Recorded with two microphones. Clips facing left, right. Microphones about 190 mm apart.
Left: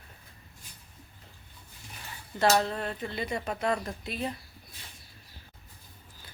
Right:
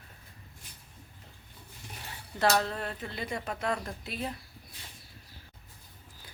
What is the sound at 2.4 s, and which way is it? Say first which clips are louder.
Speech: left 2 dB; centre (ahead or behind).